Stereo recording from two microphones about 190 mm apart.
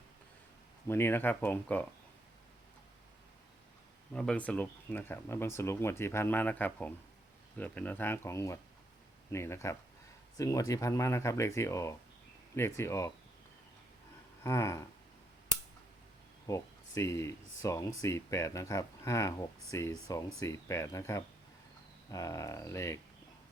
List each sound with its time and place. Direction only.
0.9 s speech: 10° left (ahead or behind)
4.1 s speech: 5° left (ahead or behind)
14.4 s speech: 15° left (ahead or behind)
16.5 s speech: 15° left (ahead or behind)